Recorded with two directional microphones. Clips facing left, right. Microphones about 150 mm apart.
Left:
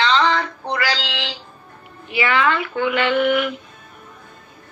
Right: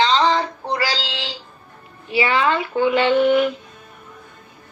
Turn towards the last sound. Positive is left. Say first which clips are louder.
# right 3 dB
turn(degrees=-30)  # may be behind; listen again after turning